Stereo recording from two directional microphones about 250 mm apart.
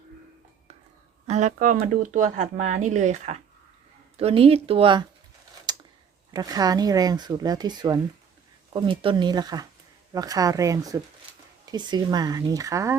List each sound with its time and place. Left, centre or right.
1.3 s speech: right
5.7 s a sound: centre
6.3 s speech: centre